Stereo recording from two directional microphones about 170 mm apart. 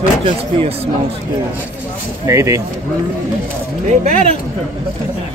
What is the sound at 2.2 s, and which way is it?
Speech, 15° right (ahead or behind).